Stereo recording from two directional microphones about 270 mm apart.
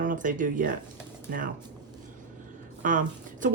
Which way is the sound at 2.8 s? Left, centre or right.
Right.